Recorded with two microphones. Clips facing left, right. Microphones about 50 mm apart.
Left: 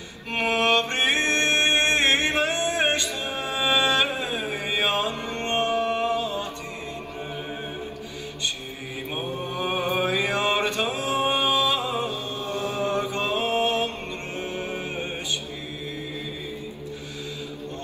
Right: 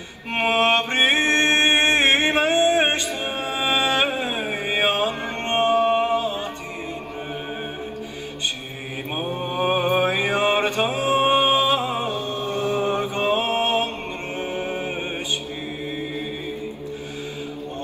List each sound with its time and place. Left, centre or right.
0.3 s mantra: right
9.1 s mantra: right
12.8 s mantra: right
14.4 s music: right